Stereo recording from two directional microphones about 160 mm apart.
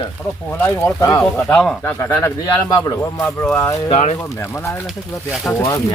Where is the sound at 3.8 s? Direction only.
40° left (ahead or behind).